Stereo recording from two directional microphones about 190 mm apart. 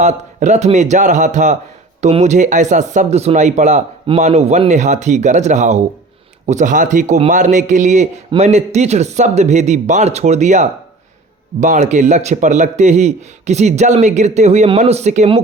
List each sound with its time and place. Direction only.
0.0 s speech: 40° right (ahead or behind)